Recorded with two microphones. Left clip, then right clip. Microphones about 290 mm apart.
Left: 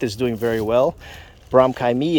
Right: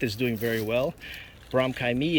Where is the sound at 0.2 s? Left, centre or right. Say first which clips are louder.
Left 7 dB; centre.